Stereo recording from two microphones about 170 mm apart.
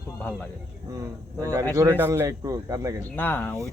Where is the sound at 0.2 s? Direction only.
10° left (ahead or behind).